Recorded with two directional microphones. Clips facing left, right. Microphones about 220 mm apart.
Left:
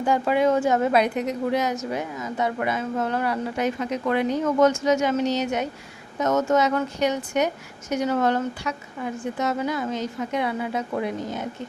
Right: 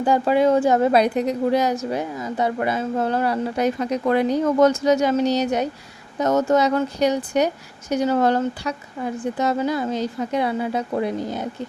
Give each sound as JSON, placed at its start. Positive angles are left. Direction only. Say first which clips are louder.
{"t": 0.0, "sound": "a woman's voice", "louder": "right 3 dB", "side_deg": -35}